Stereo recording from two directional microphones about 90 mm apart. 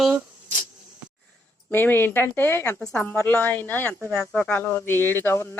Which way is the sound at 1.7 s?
25° left (ahead or behind).